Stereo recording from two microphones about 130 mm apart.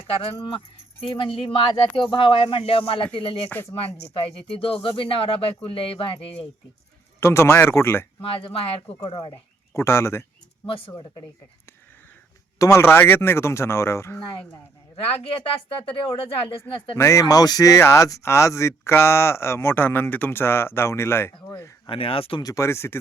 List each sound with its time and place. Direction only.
0.1 s speech: 50° left (ahead or behind)
3.5 s speech: 15° left (ahead or behind)
3.8 s speech: 50° left (ahead or behind)
7.2 s speech: 20° left (ahead or behind)
8.2 s speech: 45° left (ahead or behind)
9.7 s speech: 20° left (ahead or behind)
10.7 s speech: 40° left (ahead or behind)
12.5 s speech: 25° left (ahead or behind)
14.9 s speech: 45° left (ahead or behind)
17.0 s speech: 25° left (ahead or behind)
21.8 s speech: 45° left (ahead or behind)
22.4 s speech: 20° left (ahead or behind)